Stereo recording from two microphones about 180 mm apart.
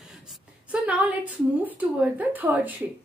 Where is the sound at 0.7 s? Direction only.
10° right (ahead or behind).